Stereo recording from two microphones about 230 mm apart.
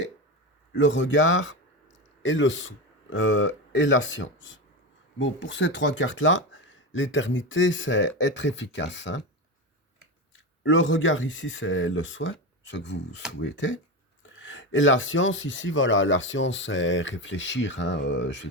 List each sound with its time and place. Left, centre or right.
0.7 s speech: left
10.6 s speech: left